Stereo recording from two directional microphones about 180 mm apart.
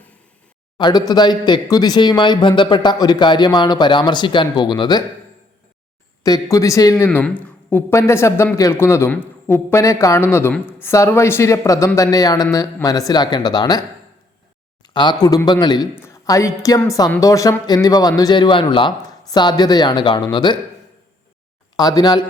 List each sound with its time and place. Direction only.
0.8 s speech: 25° left (ahead or behind)
6.2 s a man's voice: 20° left (ahead or behind)
14.9 s speech: 25° left (ahead or behind)
21.8 s speech: 20° left (ahead or behind)